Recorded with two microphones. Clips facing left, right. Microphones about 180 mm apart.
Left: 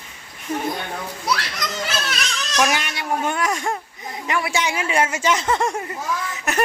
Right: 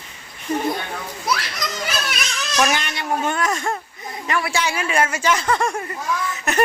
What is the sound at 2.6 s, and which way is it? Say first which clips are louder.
Speech: even; 10° left (ahead or behind).